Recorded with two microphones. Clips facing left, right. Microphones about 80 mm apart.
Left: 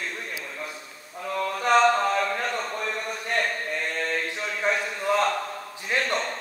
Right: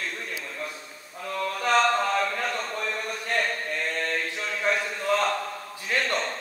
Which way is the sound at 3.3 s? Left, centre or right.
Centre.